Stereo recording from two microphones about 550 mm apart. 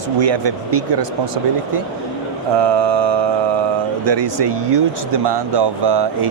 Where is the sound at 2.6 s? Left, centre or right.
Right.